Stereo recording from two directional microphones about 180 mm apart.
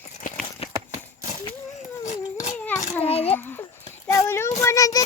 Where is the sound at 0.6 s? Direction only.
35° left (ahead or behind).